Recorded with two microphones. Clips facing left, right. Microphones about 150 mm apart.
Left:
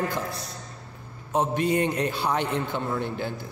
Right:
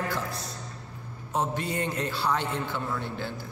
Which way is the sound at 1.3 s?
20° left (ahead or behind).